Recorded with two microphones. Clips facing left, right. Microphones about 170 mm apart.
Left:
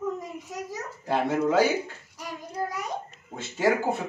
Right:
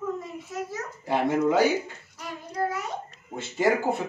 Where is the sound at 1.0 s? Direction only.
15° right (ahead or behind).